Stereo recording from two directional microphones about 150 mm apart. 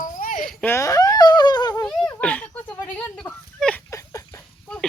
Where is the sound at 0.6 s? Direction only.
20° left (ahead or behind).